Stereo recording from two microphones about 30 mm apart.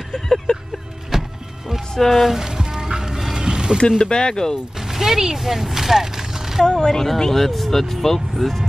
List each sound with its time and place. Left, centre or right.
0.1 s vehicle: left
1.1 s music: centre
2.0 s speech: centre
2.3 s music: centre
3.3 s a sound: right
4.0 s speech: left
4.7 s music: centre
6.6 s speech: left; by 8.6 s centre